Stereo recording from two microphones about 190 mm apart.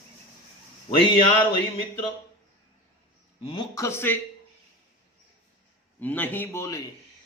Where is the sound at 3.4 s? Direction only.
30° left (ahead or behind).